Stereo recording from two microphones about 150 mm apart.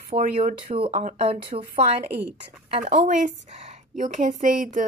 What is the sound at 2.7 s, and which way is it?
A woman's voice, 50° right (ahead or behind).